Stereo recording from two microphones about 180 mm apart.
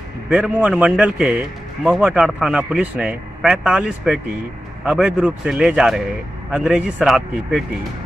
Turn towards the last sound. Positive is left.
turn(degrees=-5)  # may be behind; listen again after turning